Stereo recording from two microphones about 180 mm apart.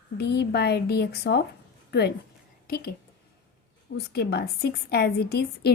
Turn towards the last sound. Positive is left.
turn(degrees=60)  # may be behind; listen again after turning